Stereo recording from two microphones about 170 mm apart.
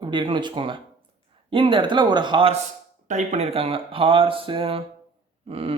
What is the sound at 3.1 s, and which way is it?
Speech, 45° right (ahead or behind).